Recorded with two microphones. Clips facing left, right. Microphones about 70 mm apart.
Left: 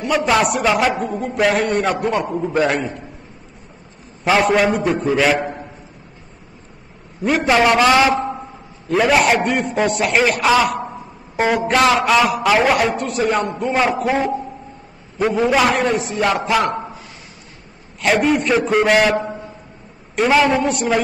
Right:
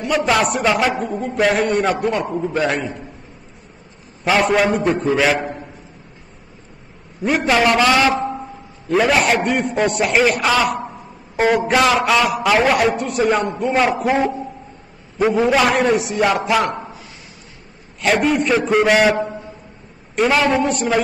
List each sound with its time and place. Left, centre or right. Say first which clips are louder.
0.0 s a man's voice: left 1 dB; centre
4.2 s a man's voice: left 1 dB; centre
7.2 s a man's voice: left 1 dB; centre
7.8 s a man's voice: left 1 dB; centre
8.8 s a man's voice: left 1 dB; centre
18.0 s a man's voice: even; centre
20.2 s a man's voice: left 1 dB; centre